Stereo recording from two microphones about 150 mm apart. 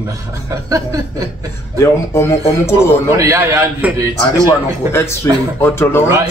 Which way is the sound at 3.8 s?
10° right (ahead or behind).